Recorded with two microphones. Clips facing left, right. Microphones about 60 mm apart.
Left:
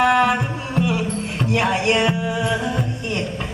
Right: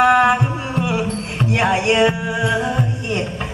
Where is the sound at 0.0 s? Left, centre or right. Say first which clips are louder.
Right 3 dB; right.